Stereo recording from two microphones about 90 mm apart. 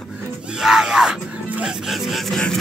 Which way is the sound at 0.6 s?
5° right (ahead or behind).